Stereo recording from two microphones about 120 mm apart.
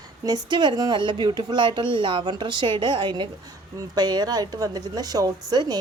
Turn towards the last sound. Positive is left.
turn(degrees=-35)  # may be behind; listen again after turning